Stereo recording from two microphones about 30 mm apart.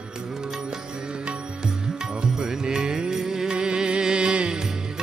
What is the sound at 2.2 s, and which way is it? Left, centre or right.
Music, right.